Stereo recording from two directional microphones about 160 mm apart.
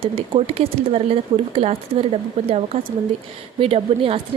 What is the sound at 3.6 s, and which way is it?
Speech, 35° right (ahead or behind).